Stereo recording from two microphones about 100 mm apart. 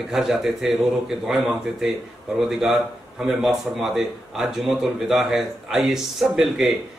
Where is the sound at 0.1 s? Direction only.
5° right (ahead or behind).